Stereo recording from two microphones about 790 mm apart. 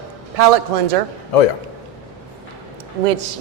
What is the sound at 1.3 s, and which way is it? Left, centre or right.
Speech, left.